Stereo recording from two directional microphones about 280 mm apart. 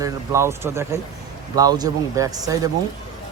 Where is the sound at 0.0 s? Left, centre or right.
Centre.